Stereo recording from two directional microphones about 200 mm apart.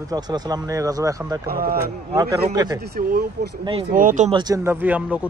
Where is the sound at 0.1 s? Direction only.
20° right (ahead or behind).